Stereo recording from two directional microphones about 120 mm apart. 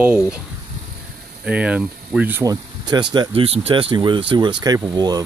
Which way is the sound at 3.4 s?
55° right (ahead or behind).